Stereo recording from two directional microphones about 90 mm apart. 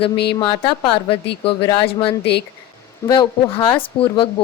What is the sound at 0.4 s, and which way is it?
A woman's voice, 65° left (ahead or behind).